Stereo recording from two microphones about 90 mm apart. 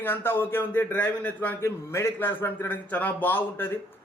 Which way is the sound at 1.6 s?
30° left (ahead or behind).